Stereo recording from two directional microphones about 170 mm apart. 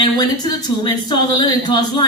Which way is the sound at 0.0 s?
25° left (ahead or behind).